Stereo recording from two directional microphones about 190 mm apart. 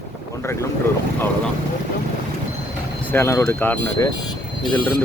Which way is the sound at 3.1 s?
15° left (ahead or behind).